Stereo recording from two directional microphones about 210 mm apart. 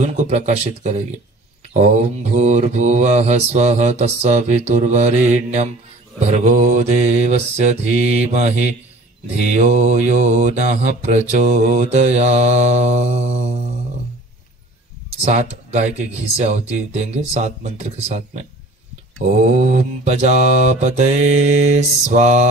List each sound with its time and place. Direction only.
0.0 s mantra: 35° right (ahead or behind)
15.0 s mantra: 35° right (ahead or behind)